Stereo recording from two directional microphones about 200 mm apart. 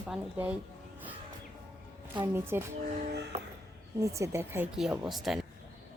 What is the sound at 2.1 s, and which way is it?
Speech, 10° right (ahead or behind).